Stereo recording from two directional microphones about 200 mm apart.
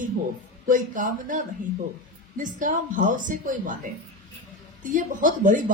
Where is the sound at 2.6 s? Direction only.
40° right (ahead or behind).